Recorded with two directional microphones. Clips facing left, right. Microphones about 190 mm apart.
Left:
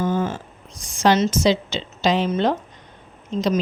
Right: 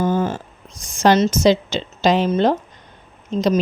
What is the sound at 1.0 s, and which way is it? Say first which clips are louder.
A woman's voice: right 3 dB; 40° right (ahead or behind).